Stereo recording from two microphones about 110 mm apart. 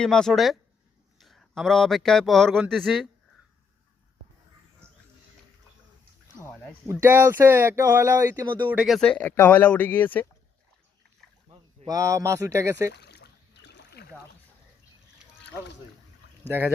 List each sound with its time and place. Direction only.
0.0 s speech: 5° left (ahead or behind)
7.0 s speech: 20° right (ahead or behind)
8.7 s speech: 5° right (ahead or behind)
9.0 s speech: 10° left (ahead or behind)
11.9 s speech: 30° right (ahead or behind)
16.5 s speech: 15° right (ahead or behind)